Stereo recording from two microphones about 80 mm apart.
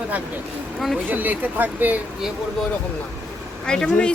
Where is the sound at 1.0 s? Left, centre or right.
Right.